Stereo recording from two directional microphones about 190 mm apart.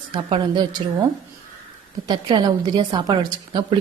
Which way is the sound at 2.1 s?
25° right (ahead or behind).